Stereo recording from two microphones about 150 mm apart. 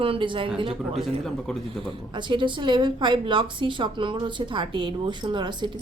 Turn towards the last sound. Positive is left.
turn(degrees=-30)  # may be behind; listen again after turning